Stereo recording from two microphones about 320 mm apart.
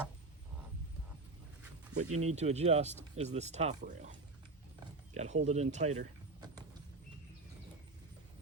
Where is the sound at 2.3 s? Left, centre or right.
Centre.